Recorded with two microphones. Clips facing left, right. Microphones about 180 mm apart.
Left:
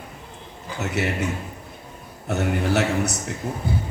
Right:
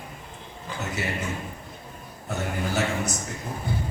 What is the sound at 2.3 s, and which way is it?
Speech, 70° left (ahead or behind).